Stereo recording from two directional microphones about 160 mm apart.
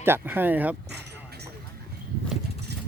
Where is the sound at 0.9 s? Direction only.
90° right.